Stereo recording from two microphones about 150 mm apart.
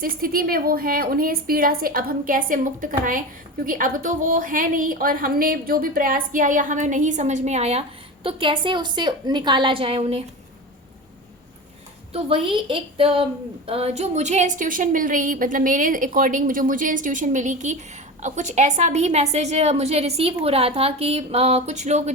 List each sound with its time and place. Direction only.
0.0 s a woman's voice: 75° right (ahead or behind); by 10.2 s 40° right (ahead or behind)
12.1 s a woman's voice: 40° right (ahead or behind)